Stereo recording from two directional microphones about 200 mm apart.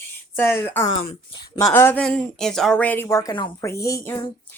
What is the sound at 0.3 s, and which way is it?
A woman's voice, 10° left (ahead or behind).